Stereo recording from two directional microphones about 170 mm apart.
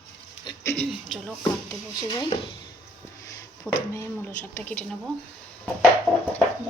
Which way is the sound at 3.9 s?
15° left (ahead or behind).